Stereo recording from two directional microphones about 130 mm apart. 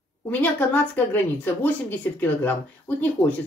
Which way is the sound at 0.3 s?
15° left (ahead or behind).